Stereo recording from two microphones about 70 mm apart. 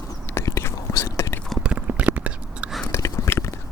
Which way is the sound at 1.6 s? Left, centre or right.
Centre.